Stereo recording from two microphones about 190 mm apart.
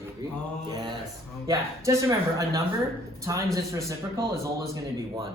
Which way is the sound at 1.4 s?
15° right (ahead or behind).